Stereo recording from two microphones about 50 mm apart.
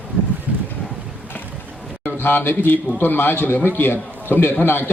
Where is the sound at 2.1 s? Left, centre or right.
Left.